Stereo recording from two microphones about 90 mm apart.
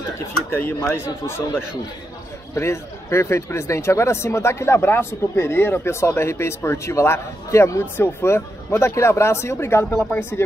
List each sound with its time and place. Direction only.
0.5 s speech: 25° left (ahead or behind)